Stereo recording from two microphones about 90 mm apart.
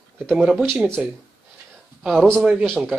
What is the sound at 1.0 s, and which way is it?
Speech, 10° right (ahead or behind).